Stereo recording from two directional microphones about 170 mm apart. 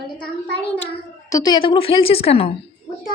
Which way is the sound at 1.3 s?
25° left (ahead or behind).